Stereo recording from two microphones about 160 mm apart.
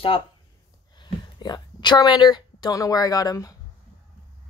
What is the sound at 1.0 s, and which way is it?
Speech, 25° left (ahead or behind).